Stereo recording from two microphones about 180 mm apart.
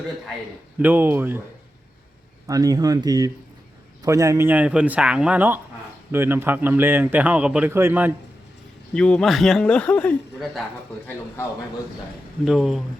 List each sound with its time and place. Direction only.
0.8 s a man's voice: 10° right (ahead or behind)
2.5 s a man's voice: 20° right (ahead or behind)
9.0 s speech: 5° left (ahead or behind)
12.5 s speech: centre (ahead or behind)